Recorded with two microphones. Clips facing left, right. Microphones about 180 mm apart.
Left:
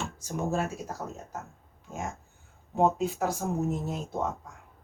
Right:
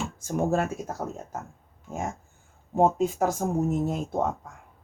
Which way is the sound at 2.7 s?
45° right (ahead or behind).